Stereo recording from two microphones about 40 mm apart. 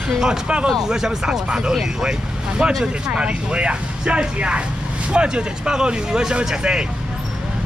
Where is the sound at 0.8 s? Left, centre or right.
Centre.